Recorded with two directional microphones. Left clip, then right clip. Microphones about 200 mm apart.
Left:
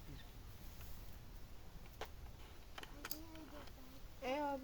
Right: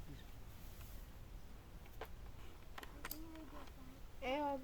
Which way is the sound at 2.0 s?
55° left (ahead or behind).